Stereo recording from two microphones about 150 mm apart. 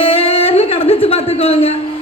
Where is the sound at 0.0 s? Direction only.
40° left (ahead or behind).